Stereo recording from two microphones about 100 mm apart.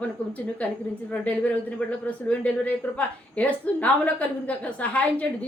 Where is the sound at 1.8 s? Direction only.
15° left (ahead or behind).